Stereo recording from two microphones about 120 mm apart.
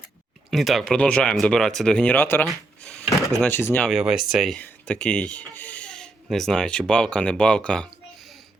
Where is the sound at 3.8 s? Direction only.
5° right (ahead or behind).